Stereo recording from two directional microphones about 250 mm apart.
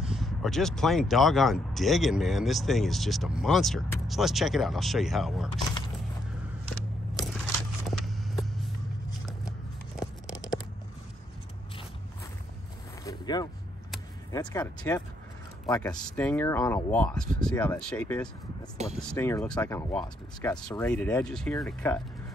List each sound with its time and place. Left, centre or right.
0.1 s speech: centre
7.9 s vehicle: centre
9.9 s a sound: centre
13.0 s zipper: centre
14.3 s speech: centre
20.8 s speech: centre